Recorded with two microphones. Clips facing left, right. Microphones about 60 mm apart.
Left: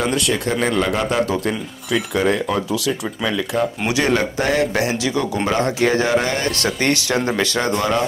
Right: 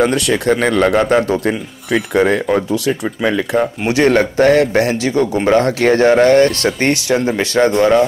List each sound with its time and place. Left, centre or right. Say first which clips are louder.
0.0 s a man's voice: right 6 dB; right
6.5 s a man's voice: right 4 dB; right